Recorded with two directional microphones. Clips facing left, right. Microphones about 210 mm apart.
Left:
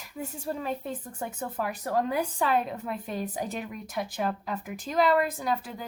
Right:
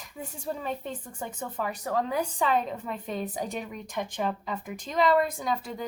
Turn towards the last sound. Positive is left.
turn(degrees=5)  # may be behind; listen again after turning